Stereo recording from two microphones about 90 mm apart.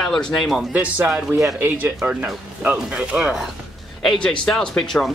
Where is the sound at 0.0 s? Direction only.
5° left (ahead or behind).